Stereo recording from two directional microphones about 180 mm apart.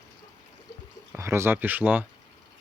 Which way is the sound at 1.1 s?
15° right (ahead or behind).